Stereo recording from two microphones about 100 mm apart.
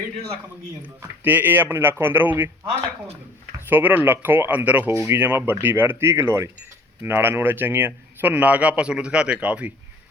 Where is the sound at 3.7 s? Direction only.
20° right (ahead or behind).